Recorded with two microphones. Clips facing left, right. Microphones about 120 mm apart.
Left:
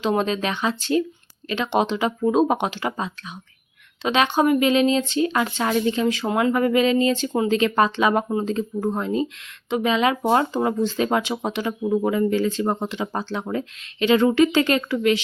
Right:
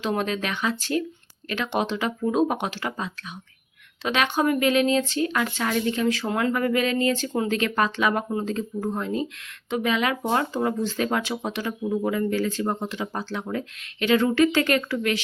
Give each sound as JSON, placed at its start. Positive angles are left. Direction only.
{"t": 0.0, "sound": "speech", "side_deg": 25}